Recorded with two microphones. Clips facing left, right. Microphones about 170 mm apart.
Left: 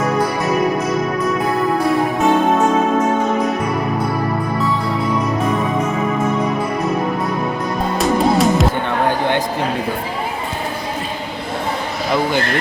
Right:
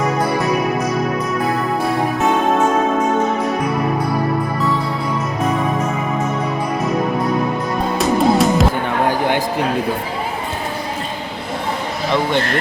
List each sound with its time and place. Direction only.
7.9 s music: centre (ahead or behind)